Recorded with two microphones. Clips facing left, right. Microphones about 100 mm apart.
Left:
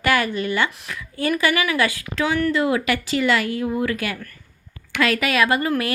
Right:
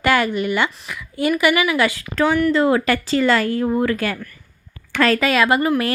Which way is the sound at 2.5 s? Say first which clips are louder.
Right 4 dB; 35° right (ahead or behind).